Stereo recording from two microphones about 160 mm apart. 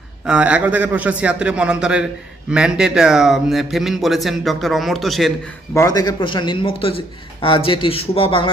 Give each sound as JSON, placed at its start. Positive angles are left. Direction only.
{"t": 0.3, "sound": "a man's voice", "side_deg": -5}
{"t": 5.7, "sound": "a man's voice", "side_deg": 20}